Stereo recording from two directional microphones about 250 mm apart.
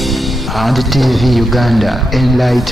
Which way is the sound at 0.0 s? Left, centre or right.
Centre.